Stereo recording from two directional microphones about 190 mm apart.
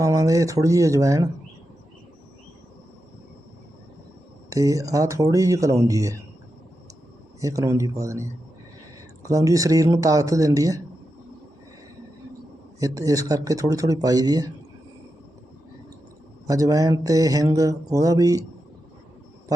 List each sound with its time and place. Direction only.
0.0 s speech: 20° right (ahead or behind)
4.4 s speech: 15° right (ahead or behind)
7.4 s speech: 15° right (ahead or behind)
12.8 s speech: 20° right (ahead or behind)
16.5 s speech: 20° right (ahead or behind)